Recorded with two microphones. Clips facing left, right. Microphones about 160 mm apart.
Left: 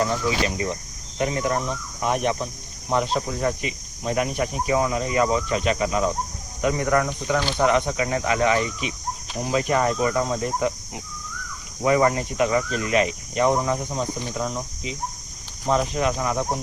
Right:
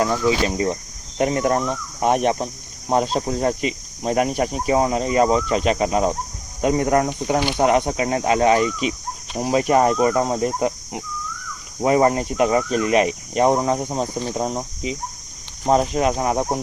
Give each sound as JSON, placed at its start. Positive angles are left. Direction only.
{"t": 0.4, "sound": "speech", "side_deg": -30}
{"t": 2.9, "sound": "speech", "side_deg": -35}
{"t": 7.3, "sound": "speech", "side_deg": -15}
{"t": 7.6, "sound": "speech", "side_deg": -35}
{"t": 13.5, "sound": "speech", "side_deg": -30}